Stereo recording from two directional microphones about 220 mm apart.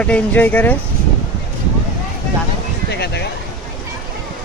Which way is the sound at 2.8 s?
50° left (ahead or behind).